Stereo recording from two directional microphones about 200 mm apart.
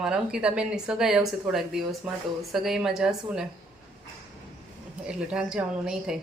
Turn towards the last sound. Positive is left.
turn(degrees=-5)  # may be behind; listen again after turning